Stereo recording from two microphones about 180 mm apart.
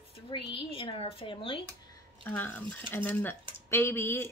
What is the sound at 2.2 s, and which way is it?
Speech, 10° left (ahead or behind).